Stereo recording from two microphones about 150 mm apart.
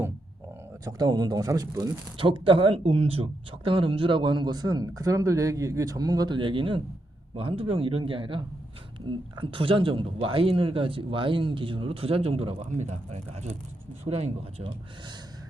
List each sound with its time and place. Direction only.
0.9 s speech: 25° right (ahead or behind)
2.1 s speech: 35° right (ahead or behind)